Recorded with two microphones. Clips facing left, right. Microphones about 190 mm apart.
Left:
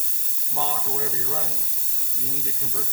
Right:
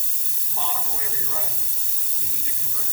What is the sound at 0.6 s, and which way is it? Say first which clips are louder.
Speech: left 5 dB; 50° left (ahead or behind).